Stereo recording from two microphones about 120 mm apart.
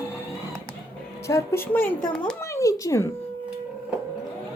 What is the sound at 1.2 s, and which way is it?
A woman's voice, 20° left (ahead or behind).